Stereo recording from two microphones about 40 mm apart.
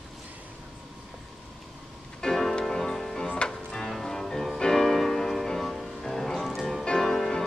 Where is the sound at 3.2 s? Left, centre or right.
Left.